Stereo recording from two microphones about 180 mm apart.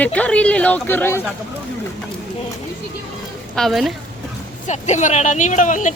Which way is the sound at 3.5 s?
Centre (ahead or behind).